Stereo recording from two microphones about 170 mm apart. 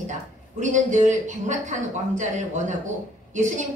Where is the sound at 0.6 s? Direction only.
45° right (ahead or behind).